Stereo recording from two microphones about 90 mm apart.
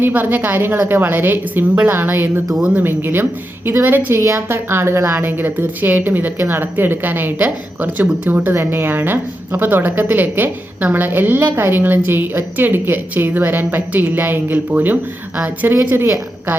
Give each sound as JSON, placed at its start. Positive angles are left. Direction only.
{"t": 0.0, "sound": "a woman's voice", "side_deg": -20}
{"t": 2.6, "sound": "a woman's voice", "side_deg": -10}
{"t": 2.8, "sound": "a woman's voice", "side_deg": -25}
{"t": 15.7, "sound": "a woman's voice", "side_deg": -30}